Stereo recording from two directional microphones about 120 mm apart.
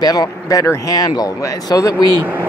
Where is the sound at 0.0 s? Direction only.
30° left (ahead or behind).